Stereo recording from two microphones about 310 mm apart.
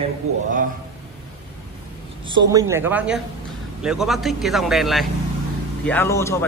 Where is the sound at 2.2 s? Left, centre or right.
Centre.